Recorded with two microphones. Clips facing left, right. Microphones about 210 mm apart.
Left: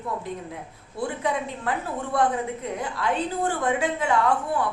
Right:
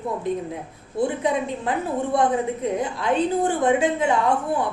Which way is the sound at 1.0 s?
20° right (ahead or behind).